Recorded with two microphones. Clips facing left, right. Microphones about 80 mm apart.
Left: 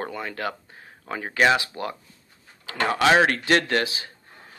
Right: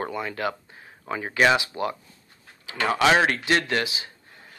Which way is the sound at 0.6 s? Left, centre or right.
Left.